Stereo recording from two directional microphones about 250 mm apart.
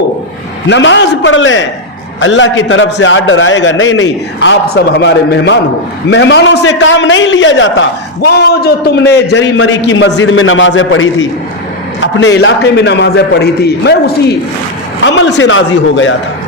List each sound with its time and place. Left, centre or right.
0.7 s a man's voice: left